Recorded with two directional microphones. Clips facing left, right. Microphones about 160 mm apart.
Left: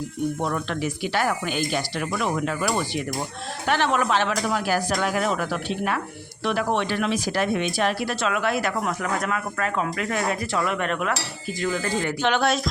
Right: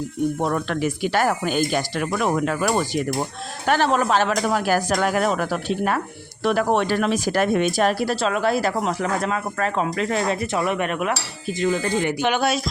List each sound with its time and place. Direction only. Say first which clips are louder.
0.4 s speech: right 4 dB; 50° right (ahead or behind); by 12.6 s 5° right (ahead or behind)